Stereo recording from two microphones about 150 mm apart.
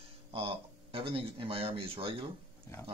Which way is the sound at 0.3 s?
35° right (ahead or behind).